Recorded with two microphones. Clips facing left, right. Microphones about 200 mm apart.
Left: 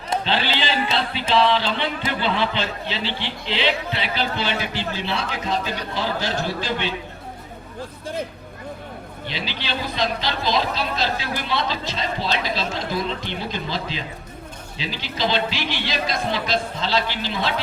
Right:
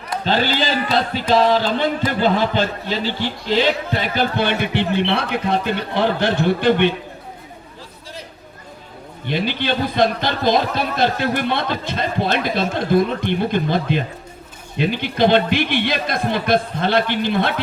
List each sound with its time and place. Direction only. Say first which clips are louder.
0.3 s a man's voice: right 8 dB; 45° right (ahead or behind)
9.2 s a man's voice: right 10 dB; 55° right (ahead or behind)